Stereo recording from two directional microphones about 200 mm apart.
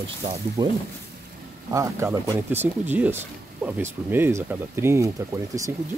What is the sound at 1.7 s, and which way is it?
Speech, 15° right (ahead or behind).